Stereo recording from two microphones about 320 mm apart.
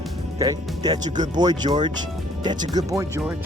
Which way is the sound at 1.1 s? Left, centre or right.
Right.